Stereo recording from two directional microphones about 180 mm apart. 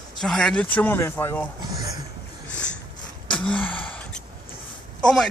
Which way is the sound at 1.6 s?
20° right (ahead or behind).